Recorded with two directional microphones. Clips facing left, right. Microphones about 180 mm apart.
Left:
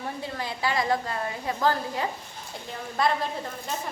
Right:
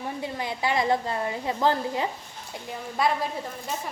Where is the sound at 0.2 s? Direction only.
20° right (ahead or behind).